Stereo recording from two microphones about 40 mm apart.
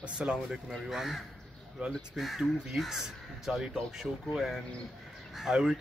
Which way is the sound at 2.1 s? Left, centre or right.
Centre.